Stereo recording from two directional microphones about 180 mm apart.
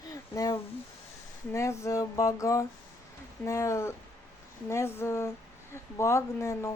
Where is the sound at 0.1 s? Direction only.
20° left (ahead or behind).